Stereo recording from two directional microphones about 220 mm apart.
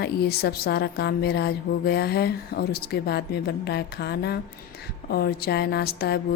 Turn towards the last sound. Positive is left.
turn(degrees=45)  # may be behind; listen again after turning